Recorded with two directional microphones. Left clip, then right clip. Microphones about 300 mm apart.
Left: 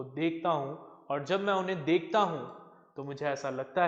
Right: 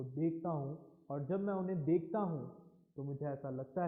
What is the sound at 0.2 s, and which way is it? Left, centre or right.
A man's voice, centre.